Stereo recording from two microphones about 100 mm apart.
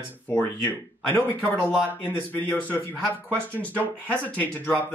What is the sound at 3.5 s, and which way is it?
Speech, 15° left (ahead or behind).